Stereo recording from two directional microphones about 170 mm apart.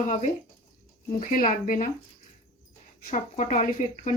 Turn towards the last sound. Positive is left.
turn(degrees=45)  # may be behind; listen again after turning